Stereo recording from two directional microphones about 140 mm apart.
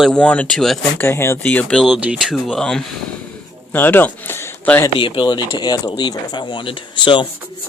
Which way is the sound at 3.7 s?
15° left (ahead or behind).